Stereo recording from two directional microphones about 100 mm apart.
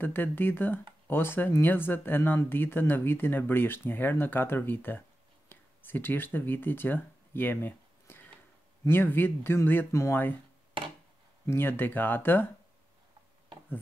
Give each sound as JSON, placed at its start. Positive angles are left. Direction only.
{"t": 0.0, "sound": "speech", "side_deg": 20}
{"t": 11.4, "sound": "speech", "side_deg": 25}